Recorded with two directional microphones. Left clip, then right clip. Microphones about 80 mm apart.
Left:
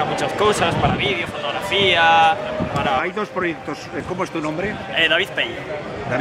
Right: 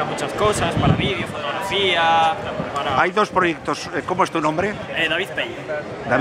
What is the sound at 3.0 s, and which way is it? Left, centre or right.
Speech, right.